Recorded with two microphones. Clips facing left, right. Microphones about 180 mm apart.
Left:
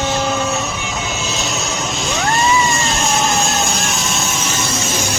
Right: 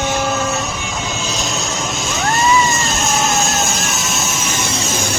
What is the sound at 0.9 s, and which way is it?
Vehicle, 5° left (ahead or behind).